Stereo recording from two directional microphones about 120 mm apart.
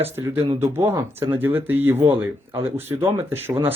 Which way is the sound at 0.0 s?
20° right (ahead or behind).